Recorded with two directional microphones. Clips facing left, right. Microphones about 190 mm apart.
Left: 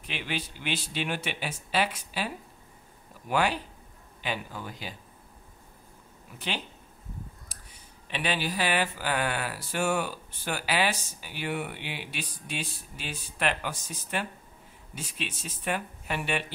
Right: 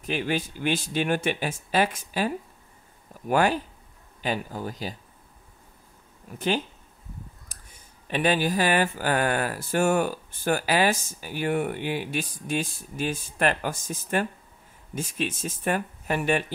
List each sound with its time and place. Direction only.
0.0 s speech: 45° right (ahead or behind)
6.3 s speech: 45° right (ahead or behind)